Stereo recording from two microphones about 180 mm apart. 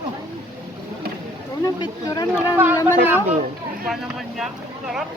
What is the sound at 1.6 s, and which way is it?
Speech, 20° left (ahead or behind).